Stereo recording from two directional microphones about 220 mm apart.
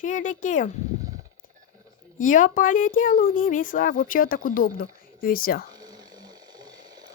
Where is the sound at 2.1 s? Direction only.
35° left (ahead or behind).